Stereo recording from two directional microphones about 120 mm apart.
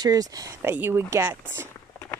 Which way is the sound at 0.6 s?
20° right (ahead or behind).